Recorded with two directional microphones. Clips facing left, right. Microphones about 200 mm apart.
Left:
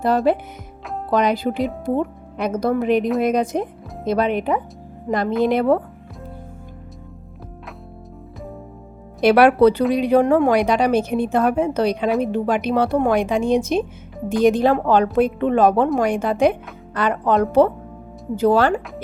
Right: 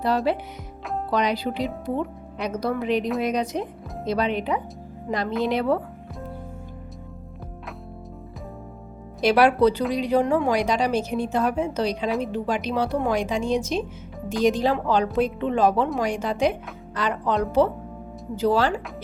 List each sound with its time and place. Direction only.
0.3 s speech: 50° left (ahead or behind)
9.2 s a woman's voice: 60° left (ahead or behind)